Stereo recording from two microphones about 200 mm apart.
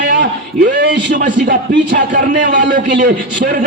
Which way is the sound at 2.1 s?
40° right (ahead or behind).